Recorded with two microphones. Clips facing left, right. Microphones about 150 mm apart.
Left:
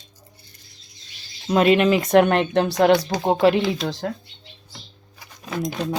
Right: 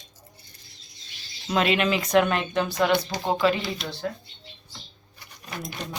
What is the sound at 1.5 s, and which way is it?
Speech, 45° left (ahead or behind).